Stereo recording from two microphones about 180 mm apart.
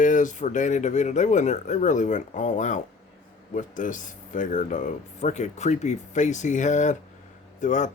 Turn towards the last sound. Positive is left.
turn(degrees=45)  # may be behind; listen again after turning